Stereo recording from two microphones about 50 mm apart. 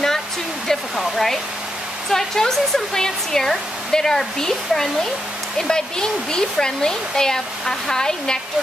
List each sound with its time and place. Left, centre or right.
0.7 s speech: centre